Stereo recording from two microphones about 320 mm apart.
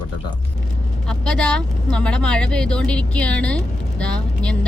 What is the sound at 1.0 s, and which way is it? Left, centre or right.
Speech, centre.